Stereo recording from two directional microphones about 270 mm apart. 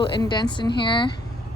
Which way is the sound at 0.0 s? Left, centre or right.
Centre.